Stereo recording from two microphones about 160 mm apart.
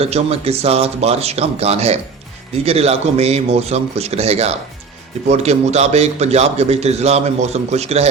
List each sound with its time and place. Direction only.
0.0 s a man's voice: 40° right (ahead or behind)